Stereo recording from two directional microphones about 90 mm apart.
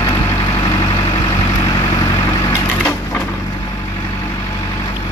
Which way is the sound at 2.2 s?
45° left (ahead or behind).